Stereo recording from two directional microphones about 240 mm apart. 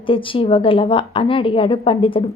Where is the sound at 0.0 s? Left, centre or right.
Left.